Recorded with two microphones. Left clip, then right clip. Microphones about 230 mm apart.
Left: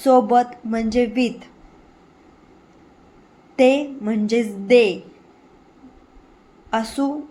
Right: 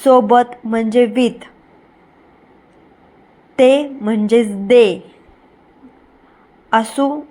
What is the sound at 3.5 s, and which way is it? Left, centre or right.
A woman's voice, centre.